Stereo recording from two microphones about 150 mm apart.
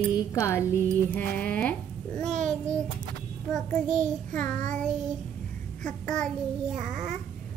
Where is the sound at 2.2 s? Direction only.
50° right (ahead or behind).